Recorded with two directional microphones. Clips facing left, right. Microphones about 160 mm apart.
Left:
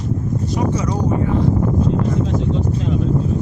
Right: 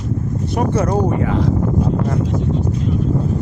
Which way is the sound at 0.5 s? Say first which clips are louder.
Right 4 dB; 60° right (ahead or behind).